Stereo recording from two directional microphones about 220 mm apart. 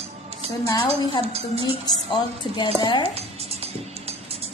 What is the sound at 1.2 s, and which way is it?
Speech, 30° right (ahead or behind).